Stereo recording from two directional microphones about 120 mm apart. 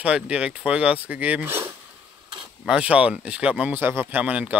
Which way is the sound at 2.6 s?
10° right (ahead or behind).